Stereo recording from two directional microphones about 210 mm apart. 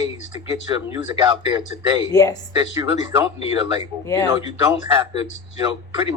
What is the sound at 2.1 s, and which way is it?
Speech, 15° left (ahead or behind).